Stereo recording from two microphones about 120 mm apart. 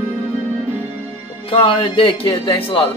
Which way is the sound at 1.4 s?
50° left (ahead or behind).